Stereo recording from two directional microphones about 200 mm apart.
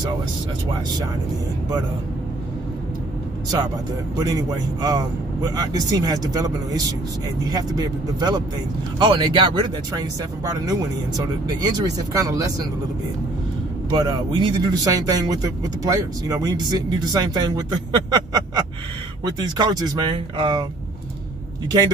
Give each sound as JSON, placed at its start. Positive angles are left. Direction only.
{"t": 4.2, "sound": "a man's voice", "side_deg": -20}
{"t": 13.8, "sound": "speech", "side_deg": -20}
{"t": 18.1, "sound": "a sound", "side_deg": -20}
{"t": 19.3, "sound": "speech", "side_deg": -20}